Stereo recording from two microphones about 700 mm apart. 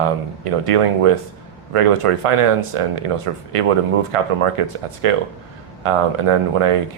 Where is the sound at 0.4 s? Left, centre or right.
Right.